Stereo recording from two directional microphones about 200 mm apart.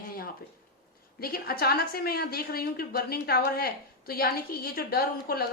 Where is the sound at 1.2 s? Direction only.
50° left (ahead or behind).